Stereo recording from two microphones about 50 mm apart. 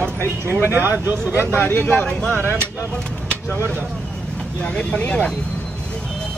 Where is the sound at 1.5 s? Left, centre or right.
Left.